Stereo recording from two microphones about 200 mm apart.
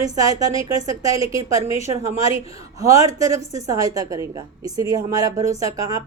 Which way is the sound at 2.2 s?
30° left (ahead or behind).